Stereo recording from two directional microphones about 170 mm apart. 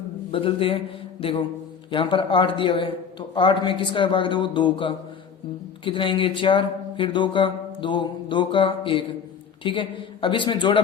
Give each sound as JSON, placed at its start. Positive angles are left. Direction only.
{"t": 0.3, "sound": "a man's voice", "side_deg": 30}